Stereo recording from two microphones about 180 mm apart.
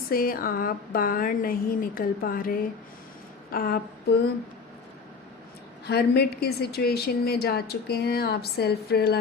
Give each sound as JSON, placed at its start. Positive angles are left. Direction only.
{"t": 0.1, "sound": "speech", "side_deg": 55}
{"t": 3.5, "sound": "a sound", "side_deg": 55}
{"t": 5.8, "sound": "a woman's voice", "side_deg": 65}